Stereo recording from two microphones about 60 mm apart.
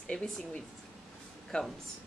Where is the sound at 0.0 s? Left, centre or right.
Centre.